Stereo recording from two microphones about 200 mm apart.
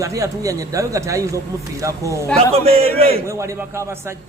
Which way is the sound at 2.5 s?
30° right (ahead or behind).